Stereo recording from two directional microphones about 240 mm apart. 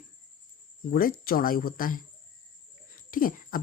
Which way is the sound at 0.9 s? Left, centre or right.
Left.